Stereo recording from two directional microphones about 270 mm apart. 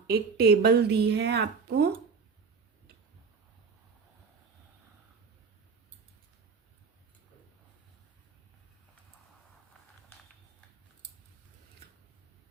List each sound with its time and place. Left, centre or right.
0.1 s a woman's voice: right